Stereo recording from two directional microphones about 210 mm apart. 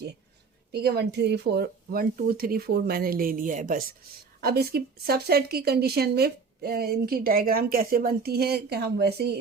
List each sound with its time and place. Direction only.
0.7 s a woman's voice: 50° right (ahead or behind)